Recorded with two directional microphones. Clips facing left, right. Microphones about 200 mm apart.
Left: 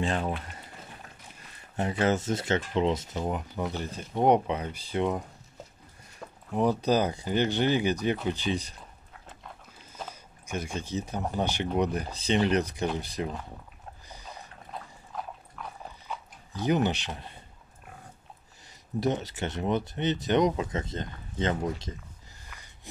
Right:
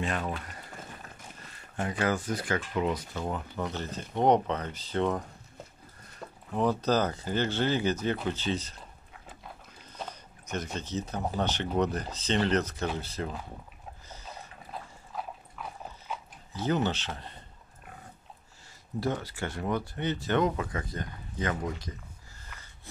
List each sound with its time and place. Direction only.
0.0 s speech: 30° left (ahead or behind)
1.8 s speech: 25° left (ahead or behind)
9.9 s a sound: 10° left (ahead or behind)
11.3 s speech: 10° left (ahead or behind)
14.0 s boat: 15° left (ahead or behind)
14.6 s dog: centre (ahead or behind)
16.5 s speech: 15° left (ahead or behind)
18.9 s speech: 20° left (ahead or behind)